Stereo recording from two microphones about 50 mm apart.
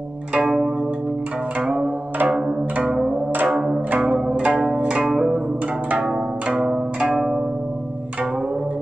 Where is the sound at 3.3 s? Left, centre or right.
Right.